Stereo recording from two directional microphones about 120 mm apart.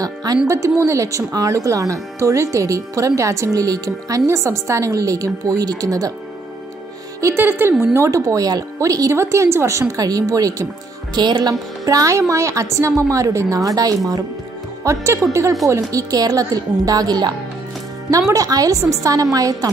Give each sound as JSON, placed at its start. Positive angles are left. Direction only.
{"t": 0.0, "sound": "speech", "side_deg": -30}
{"t": 7.2, "sound": "a woman's voice", "side_deg": -20}
{"t": 18.3, "sound": "speech", "side_deg": -30}